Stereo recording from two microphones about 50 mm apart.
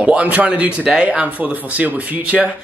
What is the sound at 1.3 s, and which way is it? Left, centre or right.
Speech, right.